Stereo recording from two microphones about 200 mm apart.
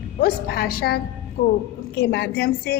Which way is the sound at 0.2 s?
50° left (ahead or behind).